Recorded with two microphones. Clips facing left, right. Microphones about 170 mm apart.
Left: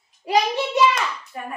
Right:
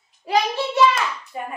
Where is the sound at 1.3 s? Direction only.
20° right (ahead or behind).